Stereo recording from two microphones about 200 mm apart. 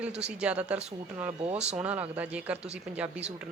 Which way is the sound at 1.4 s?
30° right (ahead or behind).